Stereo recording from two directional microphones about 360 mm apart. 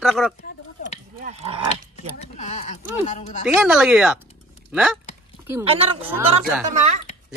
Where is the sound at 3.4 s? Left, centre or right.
Centre.